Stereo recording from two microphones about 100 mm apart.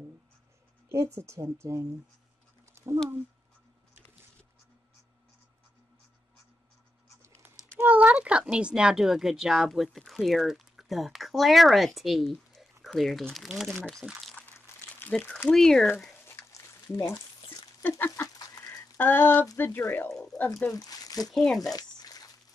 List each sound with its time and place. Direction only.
0.8 s speech: 30° right (ahead or behind)
2.6 s a sound: 30° right (ahead or behind)
7.7 s speech: 20° right (ahead or behind); by 13.9 s 5° left (ahead or behind)
15.0 s crumpling: 15° left (ahead or behind)
15.5 s speech: 5° left (ahead or behind)
16.3 s a sound: 25° left (ahead or behind)
17.8 s speech: 20° left (ahead or behind)
18.7 s a sound: 20° left (ahead or behind)
19.4 s speech: 25° left (ahead or behind)
20.7 s speech: 40° left (ahead or behind)
21.3 s speech: 5° left (ahead or behind)
21.5 s a sound: 40° left (ahead or behind)